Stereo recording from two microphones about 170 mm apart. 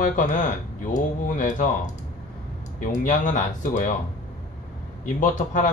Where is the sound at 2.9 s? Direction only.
50° left (ahead or behind).